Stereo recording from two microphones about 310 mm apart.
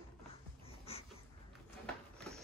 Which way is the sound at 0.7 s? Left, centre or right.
Centre.